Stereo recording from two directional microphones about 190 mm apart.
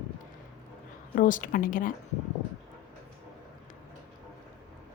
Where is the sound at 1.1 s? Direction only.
45° left (ahead or behind).